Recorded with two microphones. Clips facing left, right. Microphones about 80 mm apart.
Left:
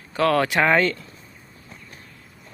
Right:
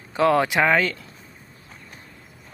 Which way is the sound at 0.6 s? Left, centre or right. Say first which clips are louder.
Left 1 dB; centre.